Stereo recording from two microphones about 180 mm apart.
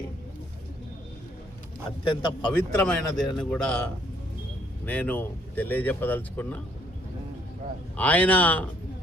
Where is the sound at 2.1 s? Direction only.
25° left (ahead or behind).